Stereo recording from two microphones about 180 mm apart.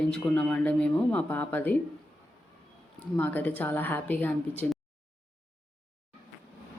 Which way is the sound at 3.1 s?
10° left (ahead or behind).